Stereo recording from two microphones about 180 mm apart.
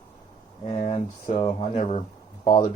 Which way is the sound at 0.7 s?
30° left (ahead or behind).